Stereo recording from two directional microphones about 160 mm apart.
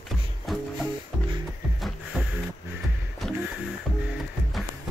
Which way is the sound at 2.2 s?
10° right (ahead or behind).